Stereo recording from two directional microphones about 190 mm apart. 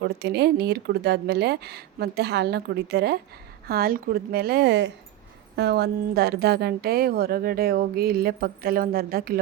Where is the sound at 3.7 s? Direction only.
50° right (ahead or behind).